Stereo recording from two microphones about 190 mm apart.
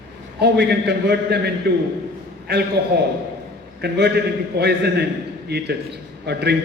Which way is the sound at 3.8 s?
60° right (ahead or behind).